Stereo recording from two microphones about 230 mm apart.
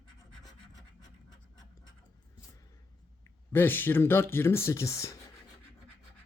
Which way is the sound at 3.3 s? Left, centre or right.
Centre.